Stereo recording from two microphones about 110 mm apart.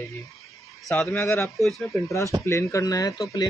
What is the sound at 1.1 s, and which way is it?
Speech, 25° left (ahead or behind).